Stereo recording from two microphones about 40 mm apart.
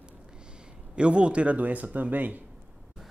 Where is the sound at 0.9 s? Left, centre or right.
Right.